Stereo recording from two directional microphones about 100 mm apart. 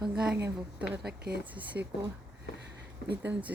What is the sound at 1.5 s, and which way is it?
Speech, 15° right (ahead or behind).